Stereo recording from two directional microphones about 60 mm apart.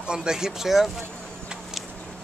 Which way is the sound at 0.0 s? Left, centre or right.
Centre.